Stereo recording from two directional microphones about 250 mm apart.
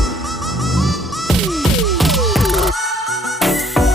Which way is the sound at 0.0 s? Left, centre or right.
Centre.